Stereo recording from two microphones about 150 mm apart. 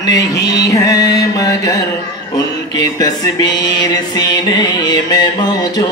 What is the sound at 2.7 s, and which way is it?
Music, 25° left (ahead or behind).